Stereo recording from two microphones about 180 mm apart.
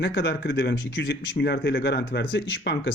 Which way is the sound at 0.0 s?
65° left (ahead or behind).